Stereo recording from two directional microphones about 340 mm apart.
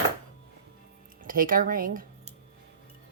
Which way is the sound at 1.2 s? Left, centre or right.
Right.